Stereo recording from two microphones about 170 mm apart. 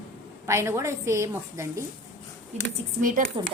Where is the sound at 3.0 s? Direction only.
50° right (ahead or behind).